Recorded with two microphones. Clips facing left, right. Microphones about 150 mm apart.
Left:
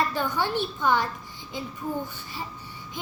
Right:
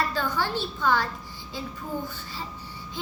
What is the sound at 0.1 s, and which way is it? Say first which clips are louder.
A child's voice: left 1 dB; 15° left (ahead or behind).